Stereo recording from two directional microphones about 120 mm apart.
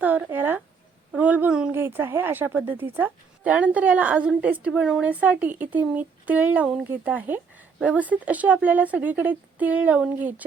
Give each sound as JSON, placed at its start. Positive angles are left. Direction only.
{"t": 0.0, "sound": "speech", "side_deg": -15}